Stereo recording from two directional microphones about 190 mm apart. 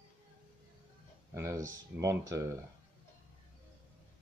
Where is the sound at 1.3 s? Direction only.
15° right (ahead or behind).